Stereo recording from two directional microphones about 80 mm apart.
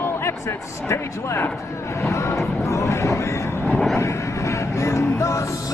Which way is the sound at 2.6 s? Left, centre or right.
Left.